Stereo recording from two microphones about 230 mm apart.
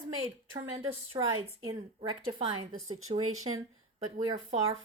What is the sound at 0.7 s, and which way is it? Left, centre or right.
A woman's voice, right.